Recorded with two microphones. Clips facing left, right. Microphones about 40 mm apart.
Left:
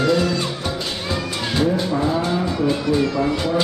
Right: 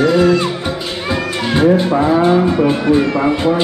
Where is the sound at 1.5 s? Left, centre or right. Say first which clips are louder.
Right 8 dB; right.